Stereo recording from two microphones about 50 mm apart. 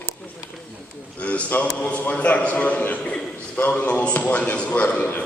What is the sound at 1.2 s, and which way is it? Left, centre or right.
A man's voice, left.